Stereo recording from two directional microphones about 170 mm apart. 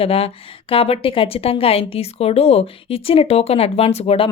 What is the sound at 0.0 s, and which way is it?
Speech, 35° left (ahead or behind).